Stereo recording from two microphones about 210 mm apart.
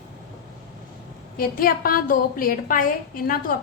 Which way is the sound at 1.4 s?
45° left (ahead or behind).